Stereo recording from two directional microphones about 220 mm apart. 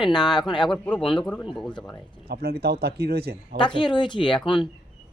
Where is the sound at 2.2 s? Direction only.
45° right (ahead or behind).